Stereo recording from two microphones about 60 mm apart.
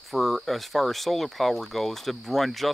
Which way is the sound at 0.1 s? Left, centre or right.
Centre.